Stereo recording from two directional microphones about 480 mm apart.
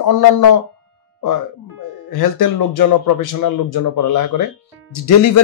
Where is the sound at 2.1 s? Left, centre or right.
Left.